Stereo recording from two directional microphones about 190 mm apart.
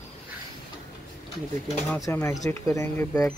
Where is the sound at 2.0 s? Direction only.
15° left (ahead or behind).